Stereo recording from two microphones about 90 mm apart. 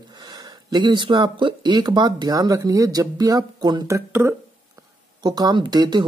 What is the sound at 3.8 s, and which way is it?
Speech, 30° right (ahead or behind).